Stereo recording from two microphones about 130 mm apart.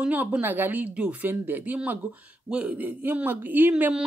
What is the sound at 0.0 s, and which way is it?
Speech, 10° right (ahead or behind).